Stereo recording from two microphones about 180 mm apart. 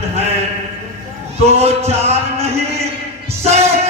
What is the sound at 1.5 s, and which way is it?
Music, 35° right (ahead or behind).